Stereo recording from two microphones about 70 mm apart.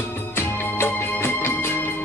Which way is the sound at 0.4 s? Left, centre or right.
Left.